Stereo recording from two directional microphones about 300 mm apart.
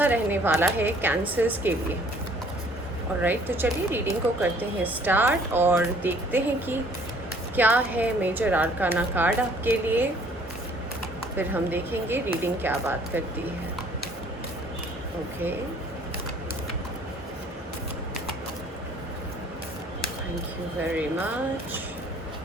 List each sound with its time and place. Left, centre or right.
0.0 s speech: centre
3.2 s a woman's voice: centre
11.3 s speech: centre